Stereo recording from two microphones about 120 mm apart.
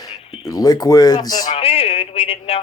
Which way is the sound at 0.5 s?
30° left (ahead or behind).